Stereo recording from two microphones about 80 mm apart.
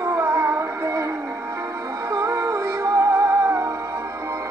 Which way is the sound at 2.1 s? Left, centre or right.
Right.